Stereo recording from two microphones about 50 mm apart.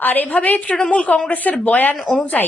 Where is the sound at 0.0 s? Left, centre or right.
Left.